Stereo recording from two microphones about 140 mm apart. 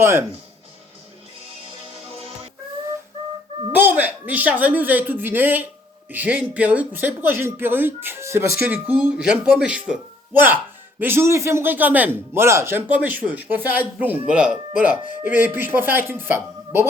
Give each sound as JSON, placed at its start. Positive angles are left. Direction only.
{"t": 0.0, "sound": "speech", "side_deg": -15}
{"t": 3.7, "sound": "speech", "side_deg": -15}